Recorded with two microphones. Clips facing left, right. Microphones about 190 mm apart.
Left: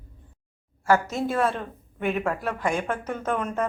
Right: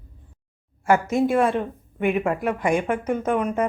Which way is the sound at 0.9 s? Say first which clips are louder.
Right 4 dB; 15° right (ahead or behind).